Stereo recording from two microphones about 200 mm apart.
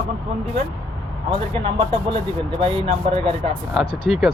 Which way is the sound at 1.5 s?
25° right (ahead or behind).